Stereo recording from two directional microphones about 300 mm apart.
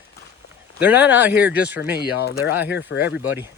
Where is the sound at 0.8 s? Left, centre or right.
Centre.